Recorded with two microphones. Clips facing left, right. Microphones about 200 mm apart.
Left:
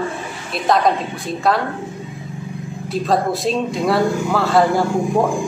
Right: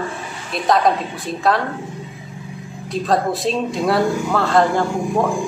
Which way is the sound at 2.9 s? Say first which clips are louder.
Even; centre (ahead or behind).